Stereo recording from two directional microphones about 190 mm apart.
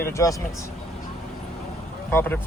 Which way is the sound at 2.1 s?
10° left (ahead or behind).